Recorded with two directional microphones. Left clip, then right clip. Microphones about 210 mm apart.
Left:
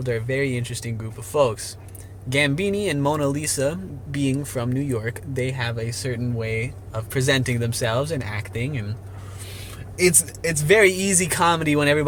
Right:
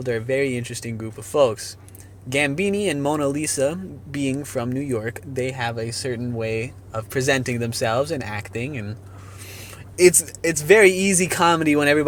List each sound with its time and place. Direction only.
0.0 s speech: 20° right (ahead or behind)
10.0 s speech: 30° right (ahead or behind)